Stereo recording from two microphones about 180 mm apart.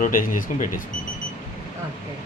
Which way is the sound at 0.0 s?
50° left (ahead or behind).